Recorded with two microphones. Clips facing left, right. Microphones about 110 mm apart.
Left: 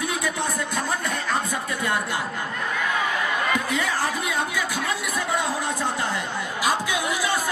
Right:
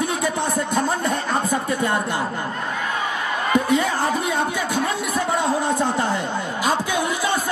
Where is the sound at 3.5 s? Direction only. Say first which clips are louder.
Right 6 dB; 30° right (ahead or behind).